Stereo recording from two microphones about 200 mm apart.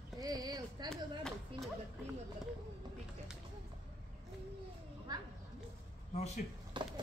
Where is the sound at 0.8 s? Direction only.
Centre (ahead or behind).